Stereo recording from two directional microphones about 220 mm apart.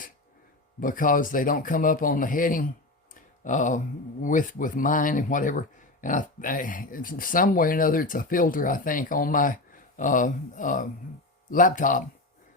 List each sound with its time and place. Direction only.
0.8 s speech: 40° left (ahead or behind)